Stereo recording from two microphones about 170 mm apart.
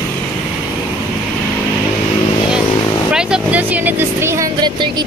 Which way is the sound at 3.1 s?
5° right (ahead or behind).